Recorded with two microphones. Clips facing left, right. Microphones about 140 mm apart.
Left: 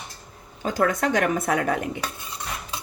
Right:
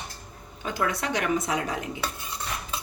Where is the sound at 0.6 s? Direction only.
45° left (ahead or behind).